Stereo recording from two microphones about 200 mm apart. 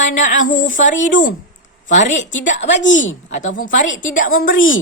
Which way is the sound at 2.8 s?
70° left (ahead or behind).